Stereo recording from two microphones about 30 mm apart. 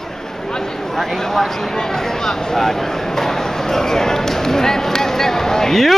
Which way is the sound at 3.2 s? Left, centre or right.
Centre.